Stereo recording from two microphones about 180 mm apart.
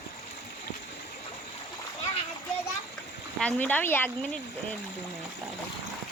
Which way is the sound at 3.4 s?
10° left (ahead or behind).